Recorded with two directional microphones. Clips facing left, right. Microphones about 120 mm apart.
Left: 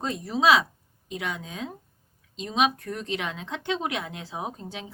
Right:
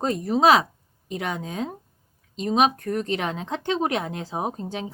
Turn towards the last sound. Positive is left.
turn(degrees=-45)  # may be behind; listen again after turning